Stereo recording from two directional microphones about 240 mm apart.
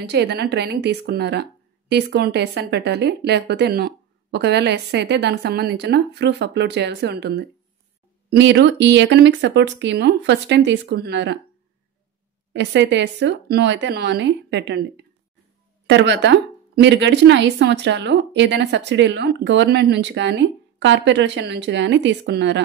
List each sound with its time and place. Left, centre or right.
0.1 s speech: right
12.5 s speech: right
15.9 s speech: right